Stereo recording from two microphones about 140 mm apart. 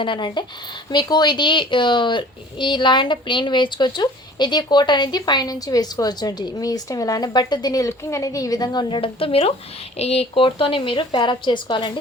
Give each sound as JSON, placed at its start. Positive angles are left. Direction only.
{"t": 0.0, "sound": "speech", "side_deg": 35}